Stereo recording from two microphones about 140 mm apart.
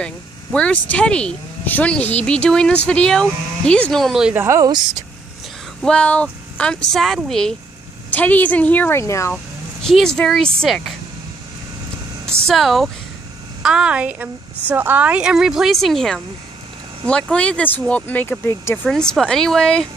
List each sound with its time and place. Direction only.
0.0 s speech: 5° left (ahead or behind)
4.4 s speech: 20° right (ahead or behind)
5.8 s speech: 5° left (ahead or behind)
9.8 s speech: 5° left (ahead or behind)
12.4 s a woman's voice: centre (ahead or behind); by 18.8 s 20° left (ahead or behind)
18.9 s speech: 5° left (ahead or behind)